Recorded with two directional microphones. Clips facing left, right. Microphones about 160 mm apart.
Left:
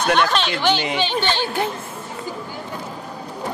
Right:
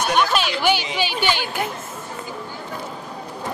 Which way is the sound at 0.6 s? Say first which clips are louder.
Left 1 dB; 10° right (ahead or behind).